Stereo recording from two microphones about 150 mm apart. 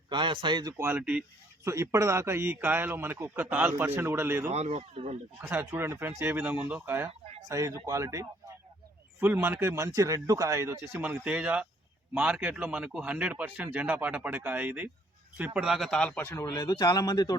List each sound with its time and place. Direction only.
0.1 s a man's voice: 30° right (ahead or behind)
0.9 s a man's voice: 10° right (ahead or behind)
4.5 s speech: 45° right (ahead or behind)
5.4 s a man's voice: 15° right (ahead or behind); by 17.3 s 25° left (ahead or behind)